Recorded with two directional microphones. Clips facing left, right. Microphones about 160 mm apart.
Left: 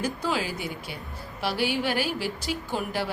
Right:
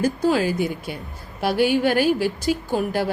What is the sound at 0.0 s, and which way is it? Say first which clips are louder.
A woman's voice: right 8 dB; 45° right (ahead or behind).